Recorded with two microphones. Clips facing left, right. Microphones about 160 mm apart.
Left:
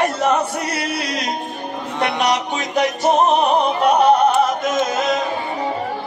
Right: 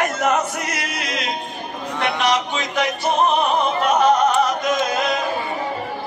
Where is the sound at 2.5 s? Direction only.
40° left (ahead or behind).